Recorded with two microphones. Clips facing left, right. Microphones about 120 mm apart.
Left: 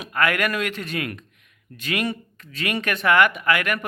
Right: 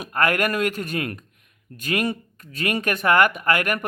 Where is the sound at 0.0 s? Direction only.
45° right (ahead or behind).